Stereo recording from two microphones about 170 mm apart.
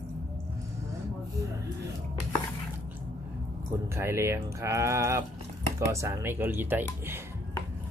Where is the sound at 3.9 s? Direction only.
15° right (ahead or behind).